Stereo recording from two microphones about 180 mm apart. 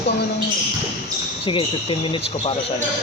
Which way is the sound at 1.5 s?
30° left (ahead or behind).